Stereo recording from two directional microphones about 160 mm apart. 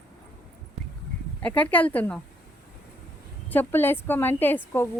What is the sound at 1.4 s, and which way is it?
Speech, 10° left (ahead or behind).